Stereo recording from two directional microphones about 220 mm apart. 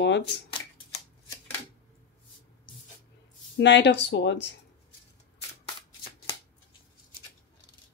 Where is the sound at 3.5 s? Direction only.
50° left (ahead or behind).